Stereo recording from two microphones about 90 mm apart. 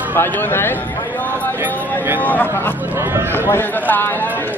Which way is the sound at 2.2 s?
20° left (ahead or behind).